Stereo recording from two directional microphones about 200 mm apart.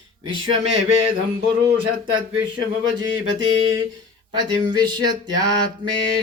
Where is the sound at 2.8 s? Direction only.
70° right (ahead or behind).